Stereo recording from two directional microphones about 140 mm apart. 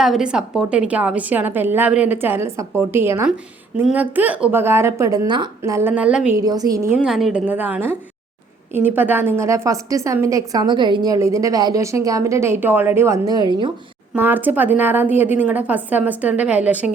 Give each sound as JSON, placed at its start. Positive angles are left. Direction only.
{"t": 0.0, "sound": "a woman's voice", "side_deg": -5}
{"t": 5.3, "sound": "a woman's voice", "side_deg": -35}
{"t": 5.7, "sound": "a woman's voice", "side_deg": -10}
{"t": 6.3, "sound": "a woman's voice", "side_deg": -25}
{"t": 6.9, "sound": "a woman's voice", "side_deg": -5}
{"t": 7.4, "sound": "a woman's voice", "side_deg": -10}
{"t": 13.2, "sound": "a woman's voice", "side_deg": -30}
{"t": 14.1, "sound": "a woman's voice", "side_deg": -15}